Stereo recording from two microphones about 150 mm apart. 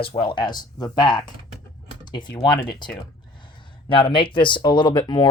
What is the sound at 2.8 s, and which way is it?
Speech, 30° left (ahead or behind).